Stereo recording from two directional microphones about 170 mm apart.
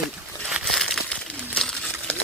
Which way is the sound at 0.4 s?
Centre (ahead or behind).